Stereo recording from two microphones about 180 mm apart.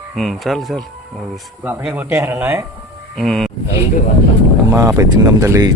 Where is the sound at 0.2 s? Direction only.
Centre (ahead or behind).